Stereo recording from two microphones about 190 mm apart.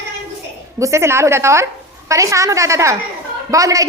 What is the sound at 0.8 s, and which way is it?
A woman's voice, 15° right (ahead or behind).